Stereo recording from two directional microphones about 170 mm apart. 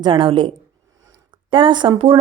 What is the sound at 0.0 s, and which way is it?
A woman's voice, 30° right (ahead or behind).